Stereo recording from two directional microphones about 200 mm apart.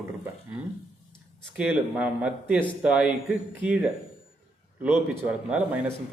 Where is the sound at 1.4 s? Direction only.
5° right (ahead or behind).